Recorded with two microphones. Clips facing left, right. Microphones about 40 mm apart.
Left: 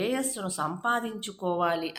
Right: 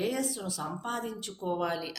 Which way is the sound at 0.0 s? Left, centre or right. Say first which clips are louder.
Left 2 dB; left.